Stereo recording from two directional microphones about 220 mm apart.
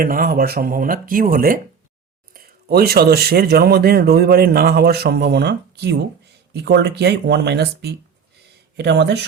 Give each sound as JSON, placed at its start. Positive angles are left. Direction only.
{"t": 0.0, "sound": "speech", "side_deg": -40}